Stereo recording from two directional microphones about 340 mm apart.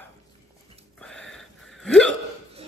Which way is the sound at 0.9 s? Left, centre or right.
Centre.